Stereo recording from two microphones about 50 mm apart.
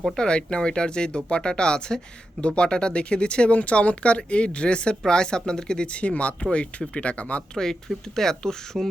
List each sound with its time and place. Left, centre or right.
0.2 s speech: centre
7.5 s speech: centre